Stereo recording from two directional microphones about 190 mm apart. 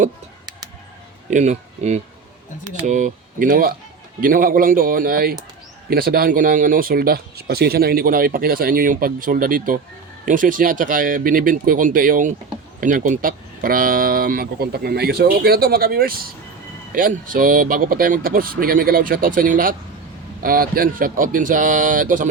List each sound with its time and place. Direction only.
1.3 s speech: 40° right (ahead or behind)